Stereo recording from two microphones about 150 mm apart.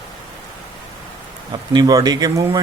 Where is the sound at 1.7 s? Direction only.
25° right (ahead or behind).